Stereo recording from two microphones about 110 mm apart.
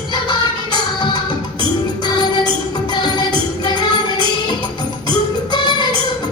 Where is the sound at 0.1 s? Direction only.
40° left (ahead or behind).